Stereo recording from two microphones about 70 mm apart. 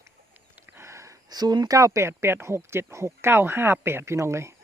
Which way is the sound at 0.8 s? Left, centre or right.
Right.